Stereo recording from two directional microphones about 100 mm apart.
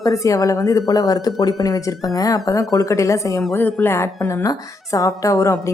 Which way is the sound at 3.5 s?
20° left (ahead or behind).